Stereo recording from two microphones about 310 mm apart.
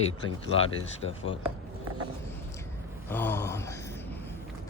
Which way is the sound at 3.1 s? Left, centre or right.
Centre.